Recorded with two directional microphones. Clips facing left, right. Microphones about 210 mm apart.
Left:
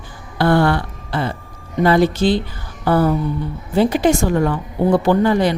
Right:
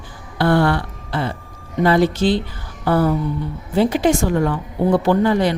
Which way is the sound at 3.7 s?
45° left (ahead or behind).